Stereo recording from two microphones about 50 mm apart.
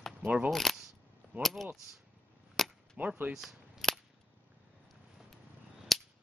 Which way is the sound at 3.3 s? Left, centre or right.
Centre.